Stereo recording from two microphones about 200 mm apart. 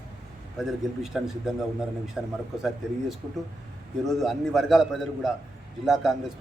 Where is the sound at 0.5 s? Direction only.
Centre (ahead or behind).